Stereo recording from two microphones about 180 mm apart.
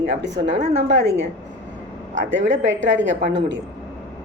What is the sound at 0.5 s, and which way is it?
Speech, 35° right (ahead or behind).